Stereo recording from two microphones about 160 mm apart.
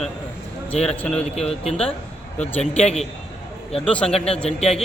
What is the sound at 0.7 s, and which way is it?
Speech, 40° left (ahead or behind).